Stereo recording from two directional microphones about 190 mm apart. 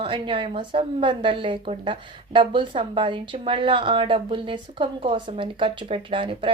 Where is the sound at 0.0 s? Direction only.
25° right (ahead or behind).